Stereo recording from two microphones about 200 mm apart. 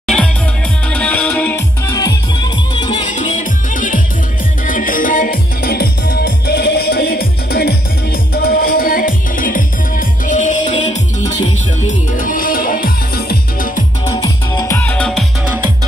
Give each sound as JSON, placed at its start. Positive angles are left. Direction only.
{"t": 0.0, "sound": "music", "side_deg": 5}
{"t": 3.1, "sound": "music", "side_deg": 40}
{"t": 11.9, "sound": "music", "side_deg": 40}
{"t": 14.0, "sound": "music", "side_deg": 20}